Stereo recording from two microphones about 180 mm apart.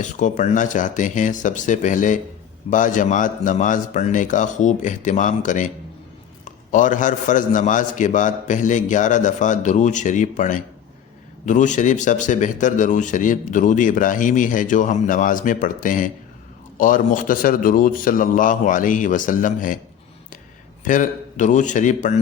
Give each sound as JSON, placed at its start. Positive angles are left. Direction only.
{"t": 0.0, "sound": "speech", "side_deg": 45}
{"t": 20.8, "sound": "speech", "side_deg": 45}